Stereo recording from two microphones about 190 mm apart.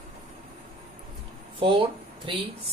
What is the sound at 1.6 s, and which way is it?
Speech, 25° right (ahead or behind).